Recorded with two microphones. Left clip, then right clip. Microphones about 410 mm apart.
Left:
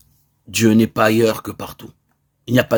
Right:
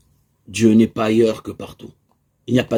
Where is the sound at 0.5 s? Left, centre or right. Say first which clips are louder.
Even; left.